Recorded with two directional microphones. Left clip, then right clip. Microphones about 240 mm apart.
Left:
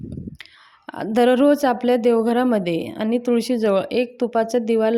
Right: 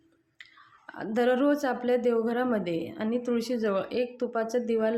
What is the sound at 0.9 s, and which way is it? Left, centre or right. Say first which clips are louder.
A woman's voice: left 9 dB; left.